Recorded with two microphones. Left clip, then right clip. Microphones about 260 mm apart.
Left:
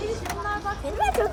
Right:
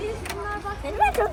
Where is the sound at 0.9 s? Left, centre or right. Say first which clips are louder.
Right 3 dB; centre.